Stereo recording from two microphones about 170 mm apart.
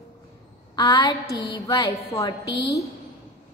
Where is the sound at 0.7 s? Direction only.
25° left (ahead or behind).